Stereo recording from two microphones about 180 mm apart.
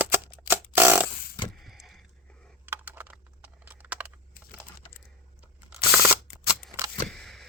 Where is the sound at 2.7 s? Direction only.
10° right (ahead or behind).